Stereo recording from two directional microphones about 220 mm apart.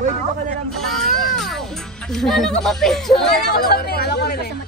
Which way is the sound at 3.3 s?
45° left (ahead or behind).